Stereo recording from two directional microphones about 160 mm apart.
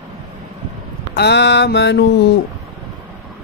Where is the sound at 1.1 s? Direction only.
90° left.